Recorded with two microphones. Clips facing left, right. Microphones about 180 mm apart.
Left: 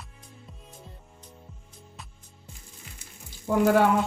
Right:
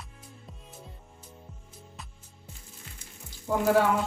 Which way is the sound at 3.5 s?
65° left (ahead or behind).